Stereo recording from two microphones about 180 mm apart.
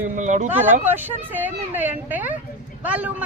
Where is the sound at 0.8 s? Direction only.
10° right (ahead or behind).